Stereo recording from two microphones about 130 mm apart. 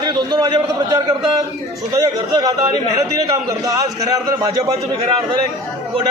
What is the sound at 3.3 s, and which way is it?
A man's voice, 25° right (ahead or behind).